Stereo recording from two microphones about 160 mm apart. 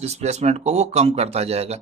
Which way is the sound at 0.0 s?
45° right (ahead or behind).